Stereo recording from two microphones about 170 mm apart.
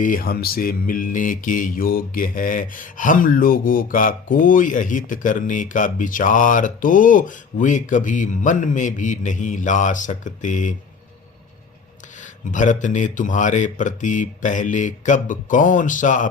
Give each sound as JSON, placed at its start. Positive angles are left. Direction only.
{"t": 0.0, "sound": "mantra", "side_deg": 55}
{"t": 12.1, "sound": "mantra", "side_deg": 50}